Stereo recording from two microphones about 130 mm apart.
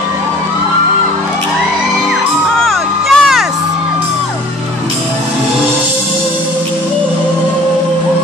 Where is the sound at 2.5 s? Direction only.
Centre (ahead or behind).